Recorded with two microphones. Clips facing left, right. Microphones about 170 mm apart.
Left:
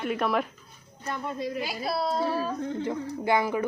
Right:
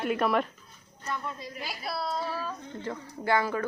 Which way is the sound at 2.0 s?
25° left (ahead or behind).